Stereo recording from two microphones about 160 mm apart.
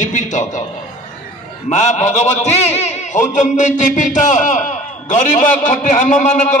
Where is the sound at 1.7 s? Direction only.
45° left (ahead or behind).